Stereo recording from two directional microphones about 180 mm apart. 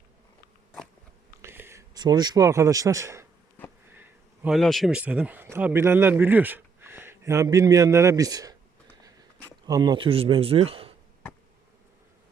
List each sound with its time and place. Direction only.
1.4 s speech: 15° right (ahead or behind)
3.9 s bee: 10° right (ahead or behind)
4.5 s a man's voice: centre (ahead or behind); by 8.5 s 20° right (ahead or behind)
9.6 s speech: 20° right (ahead or behind)